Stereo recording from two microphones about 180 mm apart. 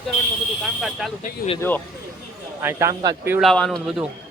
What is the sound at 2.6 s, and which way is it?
Speech, 15° right (ahead or behind).